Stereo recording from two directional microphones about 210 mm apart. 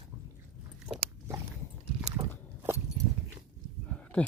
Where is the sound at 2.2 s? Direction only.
15° right (ahead or behind).